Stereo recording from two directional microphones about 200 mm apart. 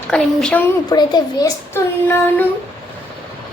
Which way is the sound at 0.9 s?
20° left (ahead or behind).